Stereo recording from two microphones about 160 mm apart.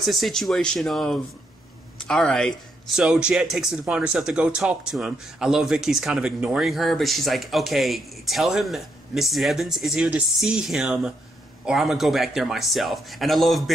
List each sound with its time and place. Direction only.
0.0 s speech: centre (ahead or behind)
3.0 s speech: 5° right (ahead or behind)